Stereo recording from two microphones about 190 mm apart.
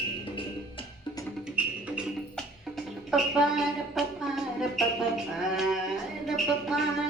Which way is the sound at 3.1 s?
Centre (ahead or behind).